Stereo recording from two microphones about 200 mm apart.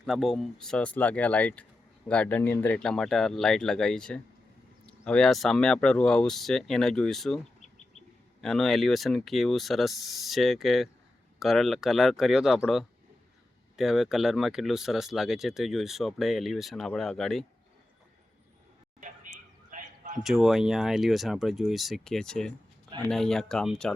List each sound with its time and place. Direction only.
0.0 s speech: centre (ahead or behind)
8.4 s speech: centre (ahead or behind)
18.9 s a sound: 40° right (ahead or behind)
20.2 s speech: centre (ahead or behind)